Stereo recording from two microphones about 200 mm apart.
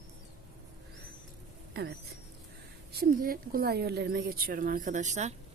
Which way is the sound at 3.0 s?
45° right (ahead or behind).